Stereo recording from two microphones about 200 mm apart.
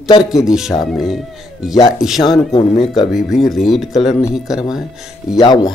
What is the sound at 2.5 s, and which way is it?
Speech, 30° left (ahead or behind).